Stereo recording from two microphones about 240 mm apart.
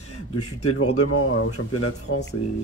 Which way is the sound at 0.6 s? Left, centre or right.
Left.